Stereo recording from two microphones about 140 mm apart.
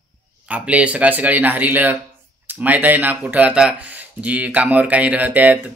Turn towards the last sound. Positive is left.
turn(degrees=-10)  # may be behind; listen again after turning